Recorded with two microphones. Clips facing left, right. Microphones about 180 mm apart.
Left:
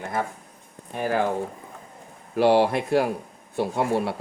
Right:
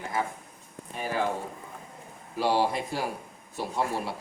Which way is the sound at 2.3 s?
60° left (ahead or behind).